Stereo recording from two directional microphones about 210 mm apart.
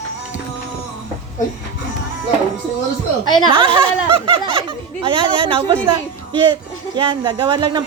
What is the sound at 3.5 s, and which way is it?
Speech, 25° right (ahead or behind).